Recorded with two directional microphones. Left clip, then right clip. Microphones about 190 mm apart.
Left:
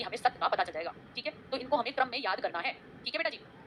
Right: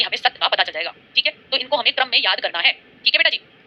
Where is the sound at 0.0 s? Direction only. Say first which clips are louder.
Right 11 dB; 5° left (ahead or behind).